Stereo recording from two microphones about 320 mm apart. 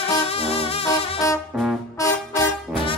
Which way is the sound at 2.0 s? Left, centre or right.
Centre.